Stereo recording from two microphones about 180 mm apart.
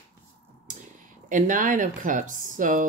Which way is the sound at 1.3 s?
45° right (ahead or behind).